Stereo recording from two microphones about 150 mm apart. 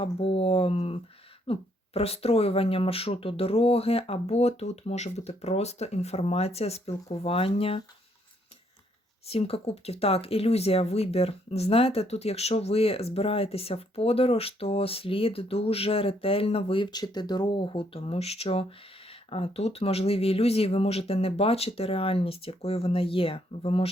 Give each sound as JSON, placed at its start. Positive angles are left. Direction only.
{"t": 0.0, "sound": "speech", "side_deg": 40}
{"t": 9.2, "sound": "speech", "side_deg": 40}